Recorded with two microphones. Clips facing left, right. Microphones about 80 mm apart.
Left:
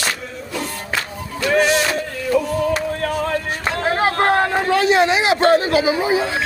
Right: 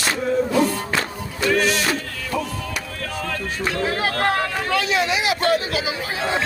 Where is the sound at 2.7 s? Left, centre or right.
Left; by 6.3 s centre.